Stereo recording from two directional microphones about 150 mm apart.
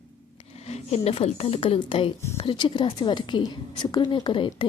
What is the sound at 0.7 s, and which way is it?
A woman's voice, 45° left (ahead or behind).